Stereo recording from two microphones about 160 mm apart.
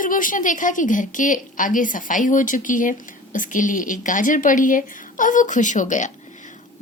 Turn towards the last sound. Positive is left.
turn(degrees=50)  # may be behind; listen again after turning